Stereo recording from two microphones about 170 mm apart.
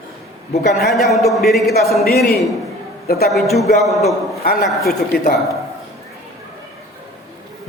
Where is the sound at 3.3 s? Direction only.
Centre (ahead or behind).